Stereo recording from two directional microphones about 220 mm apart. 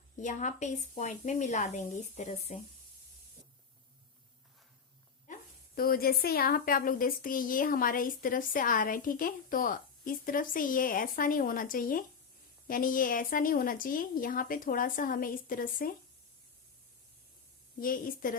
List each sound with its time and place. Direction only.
0.2 s a woman's voice: 35° left (ahead or behind)
5.3 s dog: 35° left (ahead or behind)
5.7 s a woman's voice: 40° left (ahead or behind)
17.7 s a woman's voice: 40° left (ahead or behind)